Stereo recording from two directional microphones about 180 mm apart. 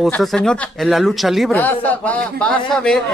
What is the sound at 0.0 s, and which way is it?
A man's voice, centre (ahead or behind).